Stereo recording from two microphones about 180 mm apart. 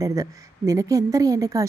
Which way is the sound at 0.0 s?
20° right (ahead or behind).